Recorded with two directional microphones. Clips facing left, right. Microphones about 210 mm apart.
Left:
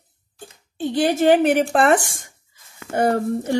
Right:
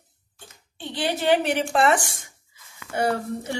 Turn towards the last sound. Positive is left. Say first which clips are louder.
# left 5 dB
turn(degrees=50)  # may be behind; listen again after turning